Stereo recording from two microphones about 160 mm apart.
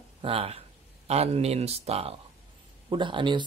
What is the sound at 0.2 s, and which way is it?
Speech, 35° right (ahead or behind).